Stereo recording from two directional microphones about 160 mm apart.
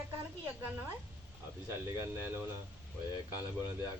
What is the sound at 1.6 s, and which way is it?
Speech, 20° right (ahead or behind).